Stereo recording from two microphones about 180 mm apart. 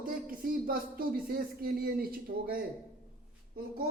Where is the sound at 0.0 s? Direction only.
50° right (ahead or behind).